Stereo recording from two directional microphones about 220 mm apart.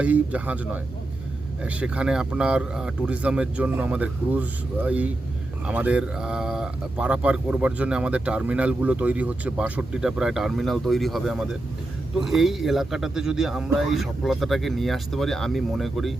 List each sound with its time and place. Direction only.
0.0 s speech: 5° right (ahead or behind)